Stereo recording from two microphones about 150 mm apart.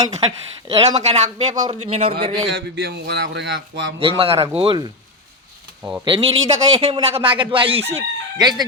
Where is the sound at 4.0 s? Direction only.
40° right (ahead or behind).